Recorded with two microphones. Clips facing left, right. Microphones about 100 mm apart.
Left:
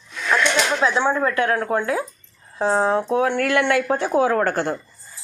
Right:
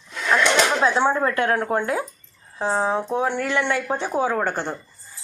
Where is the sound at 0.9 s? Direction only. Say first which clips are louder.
Even; 30° right (ahead or behind).